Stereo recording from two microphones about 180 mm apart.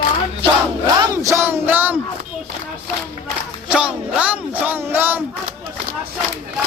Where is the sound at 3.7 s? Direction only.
5° right (ahead or behind).